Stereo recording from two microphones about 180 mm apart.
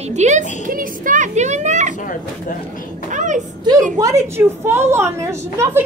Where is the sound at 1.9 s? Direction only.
50° left (ahead or behind).